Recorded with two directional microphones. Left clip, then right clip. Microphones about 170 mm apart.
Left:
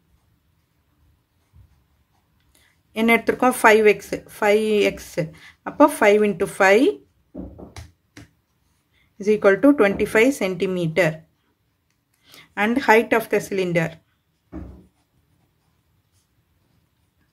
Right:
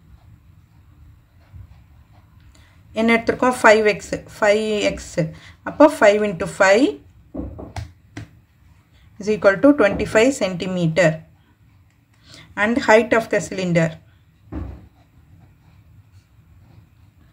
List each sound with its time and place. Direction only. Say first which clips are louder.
2.9 s speech: right 1 dB; 40° left (ahead or behind)
9.2 s speech: right 1 dB; 35° left (ahead or behind)
12.3 s speech: right 2 dB; 40° left (ahead or behind)